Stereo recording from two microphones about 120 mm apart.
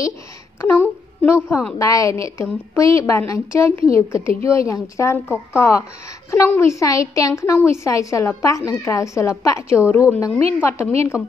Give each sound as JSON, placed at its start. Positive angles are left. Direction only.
{"t": 0.6, "sound": "a woman's voice", "side_deg": 20}